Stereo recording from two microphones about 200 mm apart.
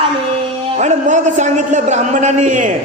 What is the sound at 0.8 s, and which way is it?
A man's voice, 35° right (ahead or behind).